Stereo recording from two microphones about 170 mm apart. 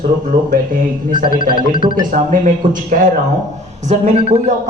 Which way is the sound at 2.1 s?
50° right (ahead or behind).